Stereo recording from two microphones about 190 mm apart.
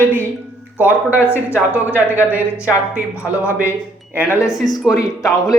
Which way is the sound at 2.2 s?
10° right (ahead or behind).